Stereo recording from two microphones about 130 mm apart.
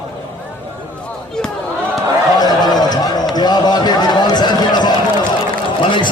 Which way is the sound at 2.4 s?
30° left (ahead or behind).